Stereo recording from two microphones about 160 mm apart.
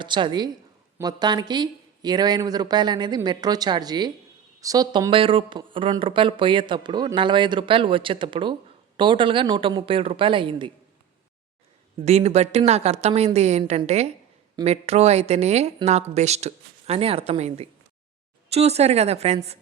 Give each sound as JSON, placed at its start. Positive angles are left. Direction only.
{"t": 0.0, "sound": "speech", "side_deg": -30}
{"t": 11.9, "sound": "speech", "side_deg": -45}